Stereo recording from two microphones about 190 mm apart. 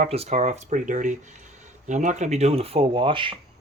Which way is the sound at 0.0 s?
35° right (ahead or behind).